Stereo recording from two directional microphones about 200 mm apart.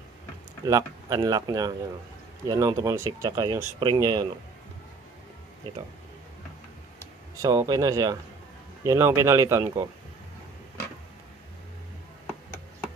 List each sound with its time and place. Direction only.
0.7 s speech: 20° right (ahead or behind)
7.4 s speech: 20° right (ahead or behind)